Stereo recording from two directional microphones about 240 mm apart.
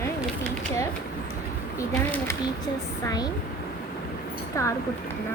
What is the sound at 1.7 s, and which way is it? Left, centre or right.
Speech, centre.